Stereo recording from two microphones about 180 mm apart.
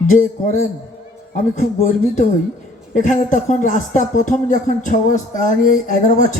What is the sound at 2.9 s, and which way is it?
Speech, 45° left (ahead or behind).